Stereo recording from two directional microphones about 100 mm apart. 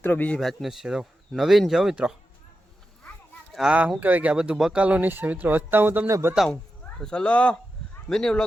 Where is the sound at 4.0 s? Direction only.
15° right (ahead or behind).